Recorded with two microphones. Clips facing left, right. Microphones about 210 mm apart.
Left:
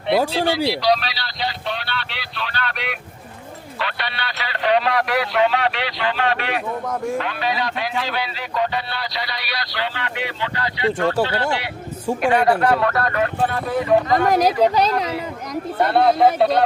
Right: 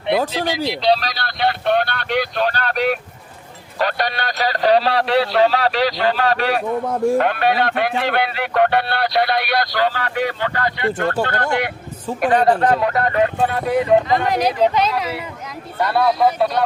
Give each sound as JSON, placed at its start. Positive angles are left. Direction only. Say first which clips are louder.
{"t": 0.3, "sound": "speech", "louder": "left 2 dB", "side_deg": -15}
{"t": 0.9, "sound": "vehicle", "louder": "right 2 dB", "side_deg": -40}
{"t": 3.8, "sound": "a man's voice", "louder": "right 7 dB", "side_deg": -45}
{"t": 12.2, "sound": "speech", "louder": "right 2 dB", "side_deg": -35}
{"t": 12.7, "sound": "speech", "louder": "right 2 dB", "side_deg": -20}
{"t": 14.1, "sound": "a man's voice", "louder": "left 1 dB", "side_deg": 45}